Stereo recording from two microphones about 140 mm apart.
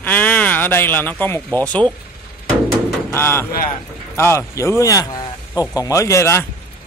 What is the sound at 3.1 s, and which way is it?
Speech, 15° left (ahead or behind).